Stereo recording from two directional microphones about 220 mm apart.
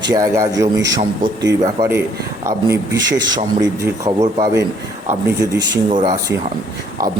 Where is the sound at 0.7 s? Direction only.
55° right (ahead or behind).